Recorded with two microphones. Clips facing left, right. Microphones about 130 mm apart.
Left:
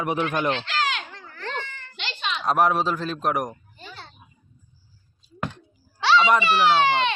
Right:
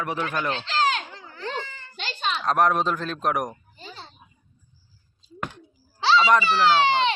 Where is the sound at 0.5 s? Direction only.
35° right (ahead or behind).